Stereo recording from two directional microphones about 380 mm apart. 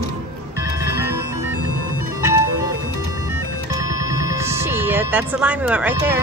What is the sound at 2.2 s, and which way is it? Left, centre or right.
Music, left.